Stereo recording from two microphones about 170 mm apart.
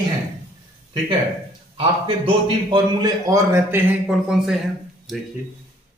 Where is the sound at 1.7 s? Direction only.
30° right (ahead or behind); by 3.8 s 15° right (ahead or behind).